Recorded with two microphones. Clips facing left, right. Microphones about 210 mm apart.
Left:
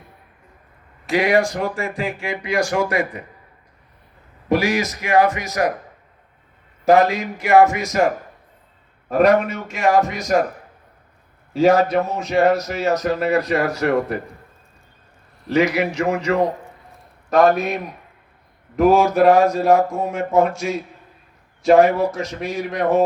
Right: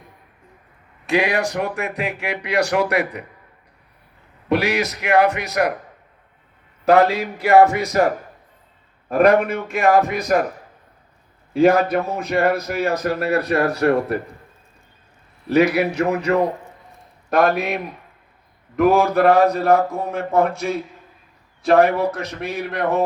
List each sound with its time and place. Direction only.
1.0 s a man's voice: 65° right (ahead or behind)
4.4 s speech: 65° right (ahead or behind)
6.8 s speech: 65° right (ahead or behind)
9.1 s speech: 55° right (ahead or behind)
11.5 s speech: 55° right (ahead or behind)
15.5 s speech: 65° right (ahead or behind)
18.8 s speech: 55° right (ahead or behind)